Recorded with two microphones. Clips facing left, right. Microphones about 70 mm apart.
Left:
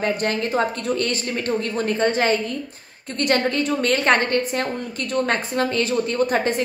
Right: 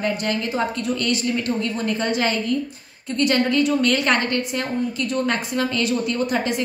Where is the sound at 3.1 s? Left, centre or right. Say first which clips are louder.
Right 1 dB; left.